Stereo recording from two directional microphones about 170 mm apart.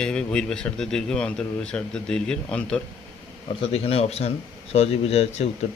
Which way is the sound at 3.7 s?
35° left (ahead or behind).